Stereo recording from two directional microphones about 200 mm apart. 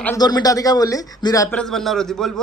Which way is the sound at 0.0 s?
15° left (ahead or behind).